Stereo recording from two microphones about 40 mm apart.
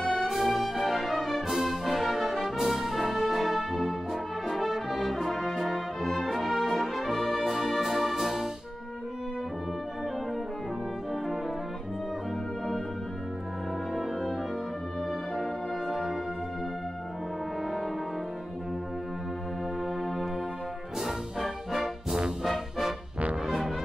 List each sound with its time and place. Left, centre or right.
0.0 s music: centre
2.5 s brass instrument: centre
15.9 s music: centre
21.0 s music: centre